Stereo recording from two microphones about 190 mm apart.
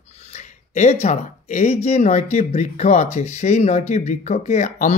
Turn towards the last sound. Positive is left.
turn(degrees=40)  # may be behind; listen again after turning